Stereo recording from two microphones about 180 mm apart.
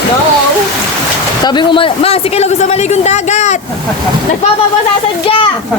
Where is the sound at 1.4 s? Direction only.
25° left (ahead or behind); by 3.5 s 40° left (ahead or behind).